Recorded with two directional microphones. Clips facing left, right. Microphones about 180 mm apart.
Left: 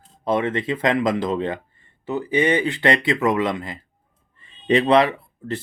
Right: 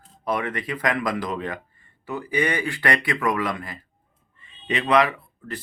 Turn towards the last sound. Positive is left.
turn(degrees=25)  # may be behind; listen again after turning